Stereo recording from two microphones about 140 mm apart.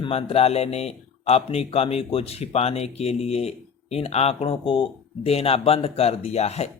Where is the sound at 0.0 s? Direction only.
45° left (ahead or behind).